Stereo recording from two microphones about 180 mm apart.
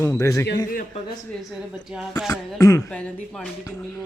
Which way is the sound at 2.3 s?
20° left (ahead or behind).